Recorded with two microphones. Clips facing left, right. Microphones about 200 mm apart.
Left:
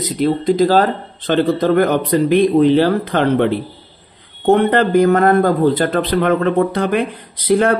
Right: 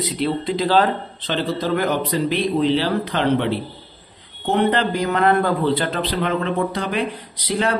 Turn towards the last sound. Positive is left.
turn(degrees=50)  # may be behind; listen again after turning